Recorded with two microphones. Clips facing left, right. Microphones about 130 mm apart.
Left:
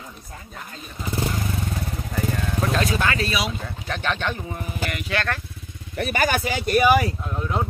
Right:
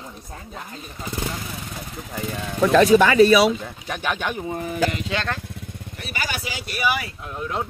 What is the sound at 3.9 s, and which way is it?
Speech, 10° right (ahead or behind).